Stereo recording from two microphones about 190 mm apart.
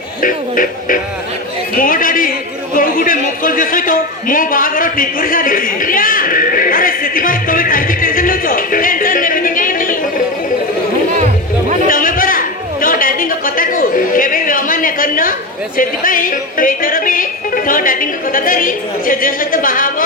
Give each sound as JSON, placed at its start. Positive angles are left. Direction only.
{"t": 0.2, "sound": "music", "side_deg": 45}
{"t": 2.7, "sound": "a man's voice", "side_deg": 50}
{"t": 11.9, "sound": "a sound", "side_deg": 45}
{"t": 15.8, "sound": "music", "side_deg": 45}